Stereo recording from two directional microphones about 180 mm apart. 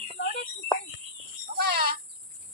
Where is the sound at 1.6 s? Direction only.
60° right (ahead or behind).